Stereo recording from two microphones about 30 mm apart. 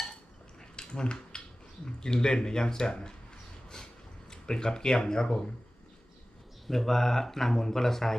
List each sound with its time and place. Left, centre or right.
0.8 s a sound: left
1.8 s speech: left
4.3 s speech: left
6.7 s speech: centre